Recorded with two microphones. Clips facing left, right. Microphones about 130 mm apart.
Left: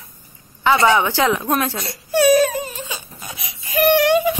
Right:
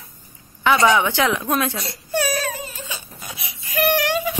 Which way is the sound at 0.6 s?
20° left (ahead or behind).